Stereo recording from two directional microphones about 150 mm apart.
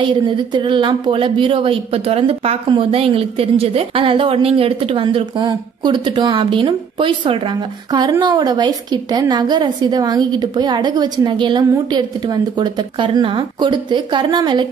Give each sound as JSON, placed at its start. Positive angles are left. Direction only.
{"t": 0.0, "sound": "a woman's voice", "side_deg": -30}